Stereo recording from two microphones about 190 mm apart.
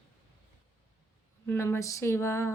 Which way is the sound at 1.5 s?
15° left (ahead or behind).